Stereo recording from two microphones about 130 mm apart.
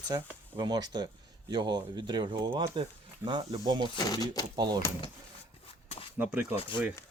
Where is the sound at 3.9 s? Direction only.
30° left (ahead or behind).